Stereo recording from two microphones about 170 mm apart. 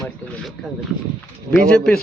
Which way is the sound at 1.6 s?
5° left (ahead or behind).